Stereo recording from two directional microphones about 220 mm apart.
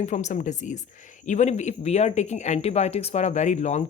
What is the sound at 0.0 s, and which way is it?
Speech, 30° left (ahead or behind).